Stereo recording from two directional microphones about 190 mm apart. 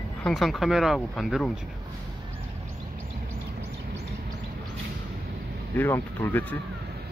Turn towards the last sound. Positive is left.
turn(degrees=10)  # may be behind; listen again after turning